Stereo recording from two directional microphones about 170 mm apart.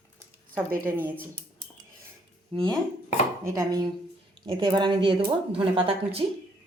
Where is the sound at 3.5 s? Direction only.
20° right (ahead or behind).